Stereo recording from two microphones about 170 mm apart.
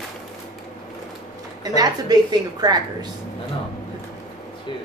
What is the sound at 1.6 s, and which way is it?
A woman's voice, 25° right (ahead or behind).